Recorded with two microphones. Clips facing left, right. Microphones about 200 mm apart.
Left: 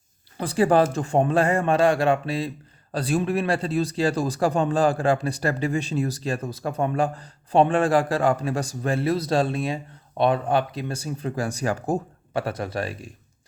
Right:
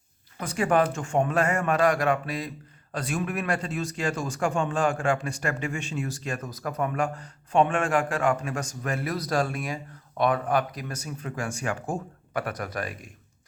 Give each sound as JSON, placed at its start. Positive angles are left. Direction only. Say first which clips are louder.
{"t": 0.3, "sound": "speech", "louder": "left 5 dB", "side_deg": 30}